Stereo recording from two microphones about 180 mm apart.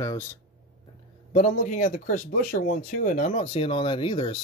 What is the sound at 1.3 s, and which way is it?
Speech, 45° left (ahead or behind).